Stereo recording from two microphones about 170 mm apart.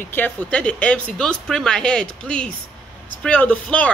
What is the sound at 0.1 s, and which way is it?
Speech, 10° left (ahead or behind).